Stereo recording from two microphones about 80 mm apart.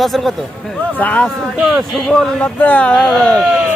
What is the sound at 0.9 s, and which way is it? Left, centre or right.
Speech, centre.